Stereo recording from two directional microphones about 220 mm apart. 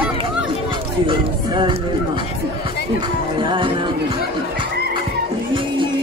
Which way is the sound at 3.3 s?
20° right (ahead or behind).